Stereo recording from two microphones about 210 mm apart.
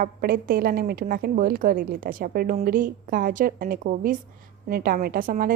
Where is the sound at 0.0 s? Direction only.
45° right (ahead or behind).